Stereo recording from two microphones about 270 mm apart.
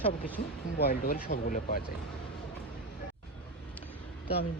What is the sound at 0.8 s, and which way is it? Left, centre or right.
Speech, left.